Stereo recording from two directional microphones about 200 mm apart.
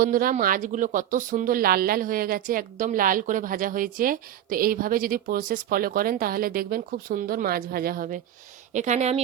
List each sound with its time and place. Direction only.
0.0 s a woman's voice: 45° right (ahead or behind)